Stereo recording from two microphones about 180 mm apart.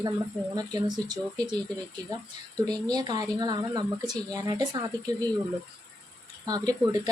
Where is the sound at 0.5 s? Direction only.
20° right (ahead or behind).